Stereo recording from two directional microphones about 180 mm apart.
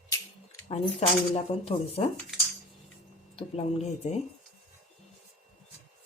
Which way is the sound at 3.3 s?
35° left (ahead or behind).